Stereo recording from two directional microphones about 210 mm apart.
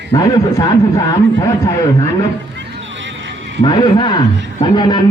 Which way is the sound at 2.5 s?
60° right (ahead or behind).